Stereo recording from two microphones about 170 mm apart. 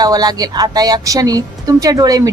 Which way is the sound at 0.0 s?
25° right (ahead or behind).